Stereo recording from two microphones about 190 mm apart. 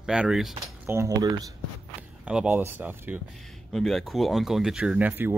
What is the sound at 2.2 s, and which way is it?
Speech, 5° right (ahead or behind).